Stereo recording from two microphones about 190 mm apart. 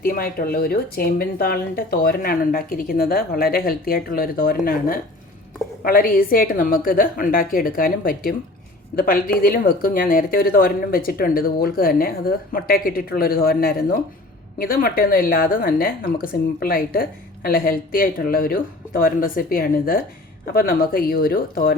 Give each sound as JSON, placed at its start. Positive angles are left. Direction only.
{"t": 0.0, "sound": "a woman's voice", "side_deg": 50}